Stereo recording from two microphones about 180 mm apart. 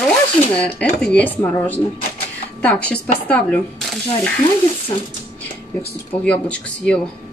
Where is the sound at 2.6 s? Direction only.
10° left (ahead or behind).